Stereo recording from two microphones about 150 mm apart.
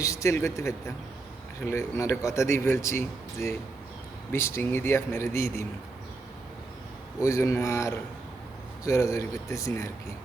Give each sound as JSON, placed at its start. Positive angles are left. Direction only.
{"t": 0.0, "sound": "speech", "side_deg": 20}
{"t": 7.2, "sound": "speech", "side_deg": 20}